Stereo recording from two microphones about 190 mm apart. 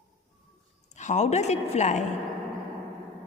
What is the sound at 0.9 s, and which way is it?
A woman's voice, 40° left (ahead or behind).